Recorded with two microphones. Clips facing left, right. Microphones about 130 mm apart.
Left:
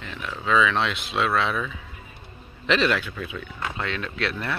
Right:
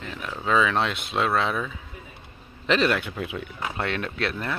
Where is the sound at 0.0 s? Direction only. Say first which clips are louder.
Even; 40° right (ahead or behind).